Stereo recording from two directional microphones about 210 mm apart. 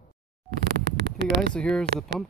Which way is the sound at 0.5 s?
55° right (ahead or behind).